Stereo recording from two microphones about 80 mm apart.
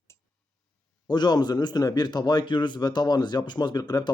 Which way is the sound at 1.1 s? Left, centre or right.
Left.